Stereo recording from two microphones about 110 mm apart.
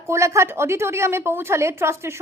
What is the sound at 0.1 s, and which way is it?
A woman's voice, 25° right (ahead or behind).